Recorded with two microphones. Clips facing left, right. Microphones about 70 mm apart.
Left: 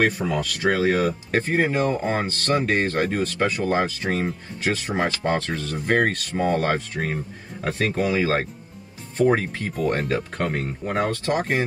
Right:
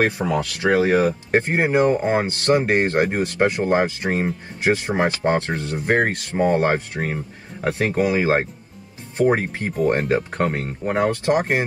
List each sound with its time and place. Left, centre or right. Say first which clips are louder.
0.2 s speech: right 3 dB; right
0.7 s speech: right 3 dB; right